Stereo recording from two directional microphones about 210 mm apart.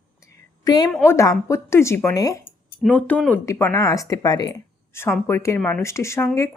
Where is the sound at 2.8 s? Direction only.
5° left (ahead or behind).